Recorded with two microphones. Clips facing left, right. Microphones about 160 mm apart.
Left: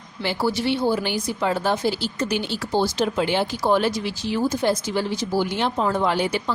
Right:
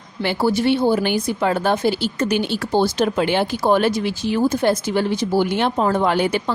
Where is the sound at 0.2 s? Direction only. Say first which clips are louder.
Right 4 dB; 55° right (ahead or behind).